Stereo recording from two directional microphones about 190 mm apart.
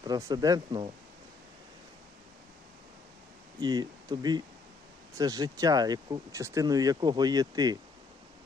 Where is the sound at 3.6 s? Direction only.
20° right (ahead or behind).